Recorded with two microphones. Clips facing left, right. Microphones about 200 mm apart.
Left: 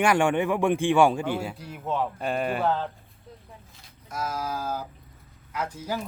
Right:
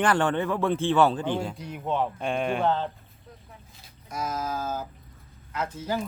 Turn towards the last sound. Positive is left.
turn(degrees=10)  # may be behind; listen again after turning